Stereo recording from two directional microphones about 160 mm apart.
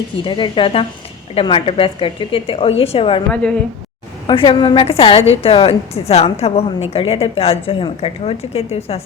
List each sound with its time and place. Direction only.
0.3 s a woman's voice: 30° left (ahead or behind)
3.3 s speech: 5° left (ahead or behind)
4.3 s a woman's voice: 30° left (ahead or behind)